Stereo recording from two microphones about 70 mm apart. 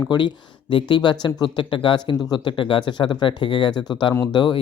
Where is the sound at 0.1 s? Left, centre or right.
Left.